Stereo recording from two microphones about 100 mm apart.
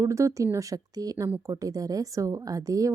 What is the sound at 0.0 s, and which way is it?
Speech, 30° right (ahead or behind).